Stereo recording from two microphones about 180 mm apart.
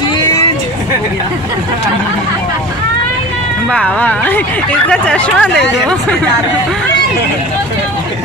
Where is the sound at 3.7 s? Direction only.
5° left (ahead or behind).